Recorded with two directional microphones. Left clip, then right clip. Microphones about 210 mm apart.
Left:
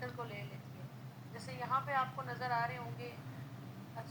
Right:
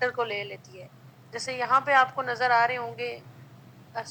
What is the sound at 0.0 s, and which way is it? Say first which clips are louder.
A woman's voice: right 17 dB; 55° right (ahead or behind).